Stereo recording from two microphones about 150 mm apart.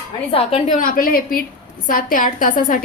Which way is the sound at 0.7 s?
70° left (ahead or behind).